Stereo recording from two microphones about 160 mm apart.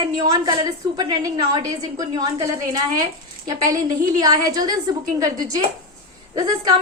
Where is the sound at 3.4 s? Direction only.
20° right (ahead or behind).